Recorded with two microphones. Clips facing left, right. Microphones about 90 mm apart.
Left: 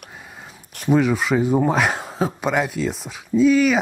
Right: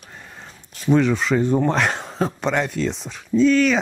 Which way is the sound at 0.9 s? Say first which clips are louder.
Even; 5° left (ahead or behind).